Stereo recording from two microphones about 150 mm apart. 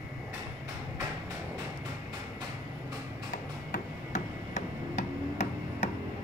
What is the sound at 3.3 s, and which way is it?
Music, 55° left (ahead or behind).